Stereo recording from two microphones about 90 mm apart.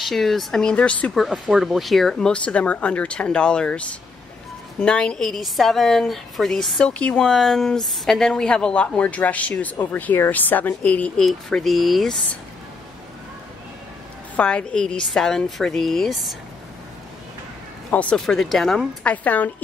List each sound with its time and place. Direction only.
0.0 s a woman's voice: centre (ahead or behind)
1.1 s a woman's voice: centre (ahead or behind); by 11.2 s 15° left (ahead or behind)
11.2 s a woman's voice: centre (ahead or behind)
14.3 s a woman's voice: 10° left (ahead or behind)
17.9 s a woman's voice: 15° left (ahead or behind)
18.2 s a woman's voice: 5° left (ahead or behind)
19.0 s a woman's voice: 20° left (ahead or behind)